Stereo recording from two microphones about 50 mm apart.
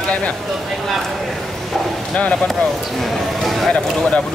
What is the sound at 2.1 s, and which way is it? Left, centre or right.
Speech, centre.